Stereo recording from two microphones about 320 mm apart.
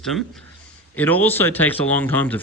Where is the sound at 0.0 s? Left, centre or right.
Centre.